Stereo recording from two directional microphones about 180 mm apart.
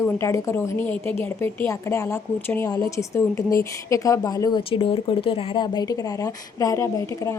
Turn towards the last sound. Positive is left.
turn(degrees=15)  # may be behind; listen again after turning